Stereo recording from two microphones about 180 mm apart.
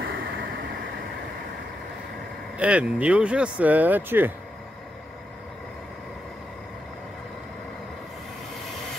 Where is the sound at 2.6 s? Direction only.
5° right (ahead or behind).